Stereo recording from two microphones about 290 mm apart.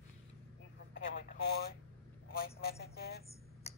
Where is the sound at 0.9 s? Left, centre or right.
Left.